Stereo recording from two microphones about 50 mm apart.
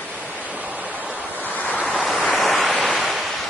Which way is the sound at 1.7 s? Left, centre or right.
Left.